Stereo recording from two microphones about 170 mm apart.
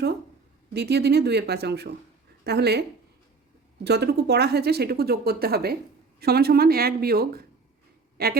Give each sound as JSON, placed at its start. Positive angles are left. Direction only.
{"t": 0.7, "sound": "speech", "side_deg": -75}
{"t": 3.8, "sound": "speech", "side_deg": -75}